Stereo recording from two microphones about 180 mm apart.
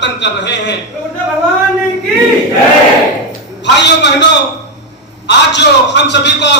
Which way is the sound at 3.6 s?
75° left (ahead or behind).